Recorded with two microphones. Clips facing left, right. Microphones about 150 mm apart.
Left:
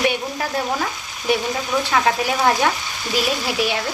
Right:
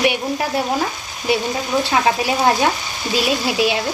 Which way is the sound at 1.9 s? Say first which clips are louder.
Right 1 dB; 20° right (ahead or behind).